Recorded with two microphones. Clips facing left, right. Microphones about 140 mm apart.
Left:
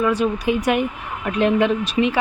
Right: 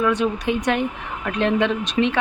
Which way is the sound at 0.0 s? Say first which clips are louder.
Left 1 dB; centre (ahead or behind).